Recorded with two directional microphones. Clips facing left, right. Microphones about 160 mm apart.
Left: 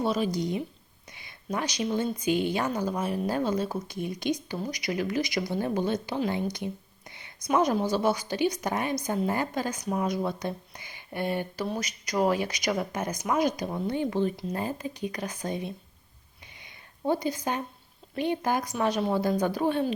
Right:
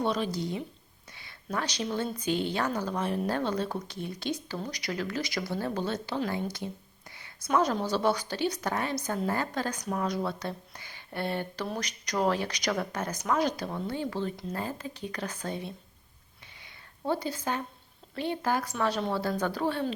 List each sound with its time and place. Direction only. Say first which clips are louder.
0.0 s a woman's voice: left 2 dB; 10° left (ahead or behind)
16.6 s a sound: left 4 dB; 15° left (ahead or behind)
18.1 s speech: left 2 dB; 15° left (ahead or behind)